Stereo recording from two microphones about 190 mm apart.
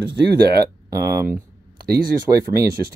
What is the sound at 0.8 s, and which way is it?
Speech, 15° right (ahead or behind).